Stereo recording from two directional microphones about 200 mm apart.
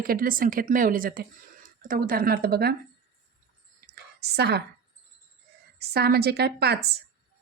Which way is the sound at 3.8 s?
55° right (ahead or behind).